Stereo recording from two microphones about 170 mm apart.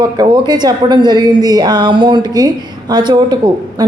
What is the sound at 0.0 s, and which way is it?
A woman's voice, 25° right (ahead or behind).